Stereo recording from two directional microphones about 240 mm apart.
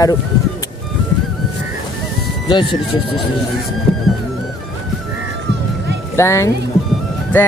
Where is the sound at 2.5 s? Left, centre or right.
Centre.